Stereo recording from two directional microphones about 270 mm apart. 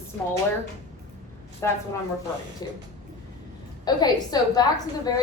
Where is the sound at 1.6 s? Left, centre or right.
Centre.